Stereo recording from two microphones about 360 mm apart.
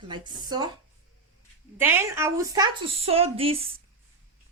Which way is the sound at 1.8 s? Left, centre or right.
Centre.